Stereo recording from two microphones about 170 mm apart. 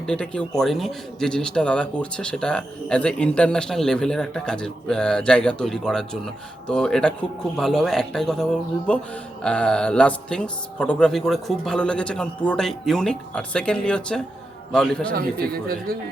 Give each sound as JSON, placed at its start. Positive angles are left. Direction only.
{"t": 0.0, "sound": "speech", "side_deg": 5}
{"t": 15.5, "sound": "speech", "side_deg": -65}